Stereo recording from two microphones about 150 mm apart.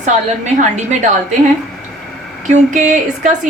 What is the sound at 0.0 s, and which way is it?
Speech, 50° right (ahead or behind).